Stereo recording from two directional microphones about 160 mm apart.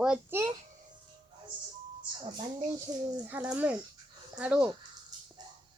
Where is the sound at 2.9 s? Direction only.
20° right (ahead or behind).